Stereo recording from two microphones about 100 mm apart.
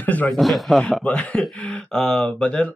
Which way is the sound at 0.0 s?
15° left (ahead or behind).